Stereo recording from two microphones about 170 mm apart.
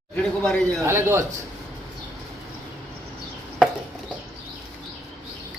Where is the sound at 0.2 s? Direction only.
5° left (ahead or behind).